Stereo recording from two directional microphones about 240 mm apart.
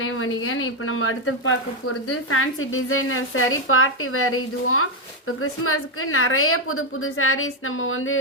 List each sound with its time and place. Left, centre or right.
0.0 s a woman's voice: left